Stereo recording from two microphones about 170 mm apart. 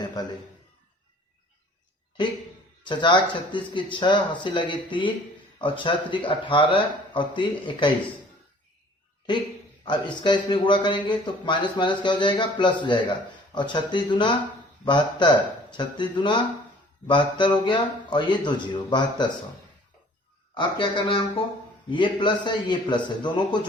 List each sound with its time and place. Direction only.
2.8 s a man's voice: 30° left (ahead or behind)
9.8 s a man's voice: 25° left (ahead or behind)
20.5 s a man's voice: 30° left (ahead or behind)